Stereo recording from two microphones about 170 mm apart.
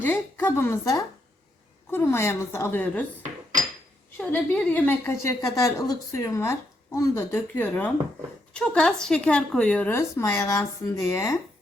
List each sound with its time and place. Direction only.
0.0 s a woman's voice: 10° left (ahead or behind)
4.2 s a woman's voice: 10° left (ahead or behind)